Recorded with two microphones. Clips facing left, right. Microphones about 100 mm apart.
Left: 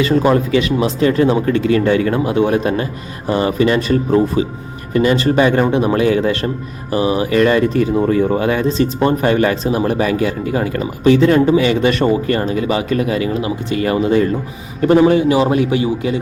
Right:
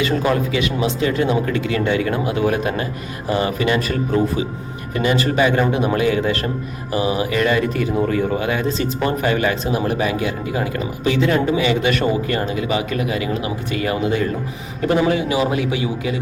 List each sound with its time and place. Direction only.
0.0 s speech: 35° left (ahead or behind)